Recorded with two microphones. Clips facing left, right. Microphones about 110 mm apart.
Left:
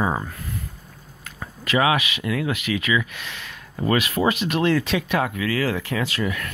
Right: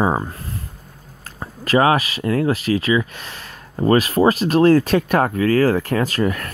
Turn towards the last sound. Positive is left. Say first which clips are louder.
# right 6 dB
turn(degrees=-45)  # may be behind; listen again after turning